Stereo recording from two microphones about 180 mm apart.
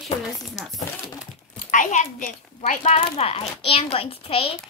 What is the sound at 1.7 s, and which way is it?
A child's voice, 45° left (ahead or behind).